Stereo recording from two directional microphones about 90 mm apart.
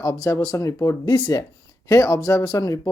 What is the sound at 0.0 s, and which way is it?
Speech, 40° left (ahead or behind).